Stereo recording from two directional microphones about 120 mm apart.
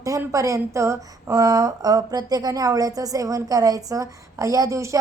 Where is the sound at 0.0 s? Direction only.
25° right (ahead or behind).